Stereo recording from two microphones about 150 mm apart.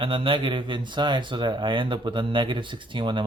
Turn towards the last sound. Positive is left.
turn(degrees=-30)  # may be behind; listen again after turning